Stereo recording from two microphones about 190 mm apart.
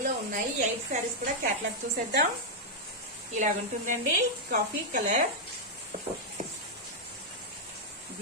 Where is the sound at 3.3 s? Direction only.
40° right (ahead or behind).